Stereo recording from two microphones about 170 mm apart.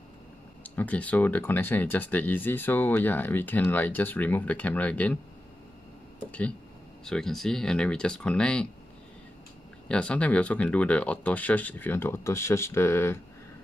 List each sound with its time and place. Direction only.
0.7 s speech: 10° left (ahead or behind)
7.1 s speech: 5° left (ahead or behind)
9.8 s speech: 5° left (ahead or behind)